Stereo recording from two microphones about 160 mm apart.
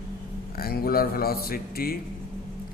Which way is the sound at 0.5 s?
70° left (ahead or behind).